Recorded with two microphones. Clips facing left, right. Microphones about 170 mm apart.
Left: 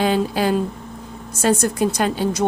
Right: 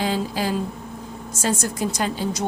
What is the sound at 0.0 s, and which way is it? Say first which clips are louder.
A woman's voice: left 5 dB; 60° left (ahead or behind).